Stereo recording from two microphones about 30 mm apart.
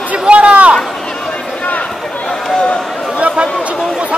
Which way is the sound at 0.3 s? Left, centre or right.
Right.